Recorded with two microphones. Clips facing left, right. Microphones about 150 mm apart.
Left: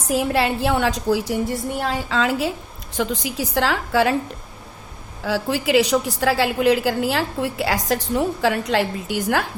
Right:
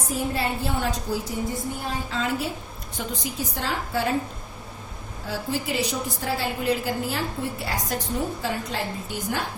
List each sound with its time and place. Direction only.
0.1 s a woman's voice: 90° left
5.2 s a woman's voice: 90° left